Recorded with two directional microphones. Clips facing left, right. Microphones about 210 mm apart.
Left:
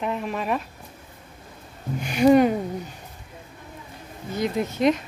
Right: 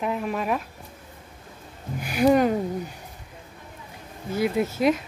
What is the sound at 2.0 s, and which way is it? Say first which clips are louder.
Speech: left 3 dB; 5° right (ahead or behind).